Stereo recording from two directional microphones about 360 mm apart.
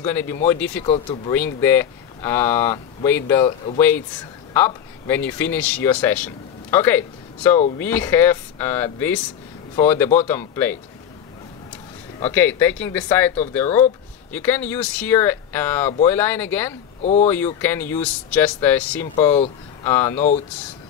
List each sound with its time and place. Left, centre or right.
0.0 s speech: centre
12.2 s speech: centre
17.0 s speech: centre
17.6 s speech: centre
19.1 s speech: centre
19.9 s speech: centre